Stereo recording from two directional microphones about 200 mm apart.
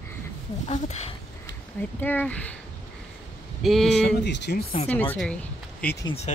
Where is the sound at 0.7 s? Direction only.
35° left (ahead or behind).